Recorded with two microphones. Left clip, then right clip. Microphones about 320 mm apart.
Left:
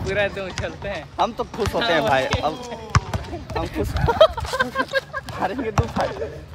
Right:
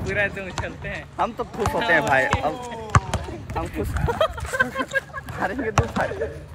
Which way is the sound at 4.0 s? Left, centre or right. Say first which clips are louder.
Left 8 dB; left.